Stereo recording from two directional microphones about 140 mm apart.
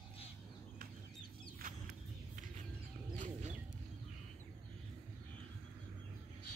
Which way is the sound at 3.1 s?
65° right (ahead or behind).